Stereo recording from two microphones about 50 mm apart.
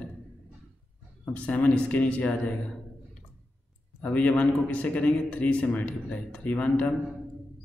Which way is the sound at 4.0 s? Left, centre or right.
Left.